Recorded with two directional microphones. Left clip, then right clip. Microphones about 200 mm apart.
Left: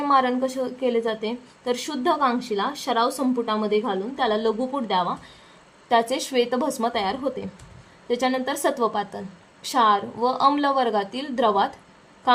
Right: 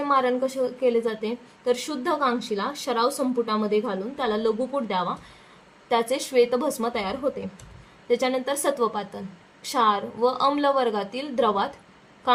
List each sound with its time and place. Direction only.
0.0 s a woman's voice: 35° left (ahead or behind)